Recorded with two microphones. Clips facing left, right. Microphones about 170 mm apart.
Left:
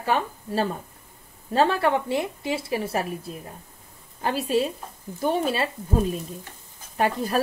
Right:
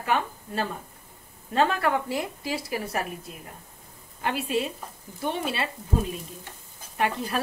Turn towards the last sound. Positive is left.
turn(degrees=40)  # may be behind; listen again after turning